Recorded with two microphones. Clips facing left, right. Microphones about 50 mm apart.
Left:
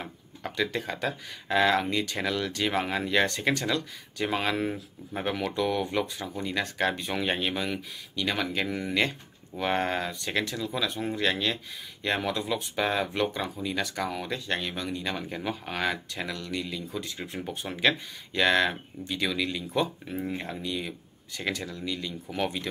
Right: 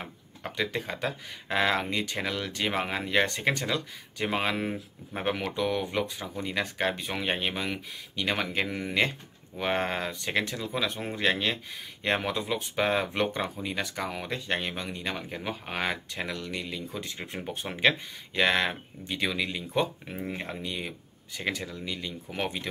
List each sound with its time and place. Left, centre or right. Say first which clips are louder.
0.0 s speech: left 1 dB; centre
5.6 s speech: left 3 dB; centre; by 13.7 s right
13.7 s speech: left 3 dB; centre
15.1 s speech: left 2 dB; centre